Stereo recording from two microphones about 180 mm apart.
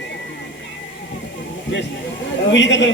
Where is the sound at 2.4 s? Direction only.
85° left.